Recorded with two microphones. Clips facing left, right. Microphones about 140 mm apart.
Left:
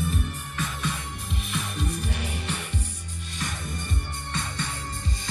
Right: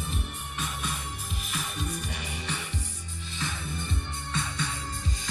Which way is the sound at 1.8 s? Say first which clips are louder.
Left 4 dB; centre (ahead or behind).